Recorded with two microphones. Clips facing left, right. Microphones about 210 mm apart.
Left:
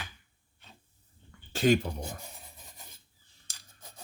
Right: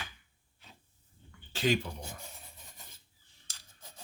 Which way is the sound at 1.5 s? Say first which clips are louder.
Left 5 dB; 45° left (ahead or behind).